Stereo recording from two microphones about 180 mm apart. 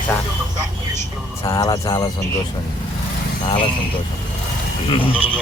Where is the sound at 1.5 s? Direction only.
20° left (ahead or behind).